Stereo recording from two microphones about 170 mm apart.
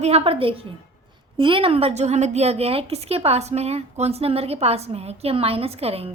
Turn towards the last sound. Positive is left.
turn(degrees=-35)  # may be behind; listen again after turning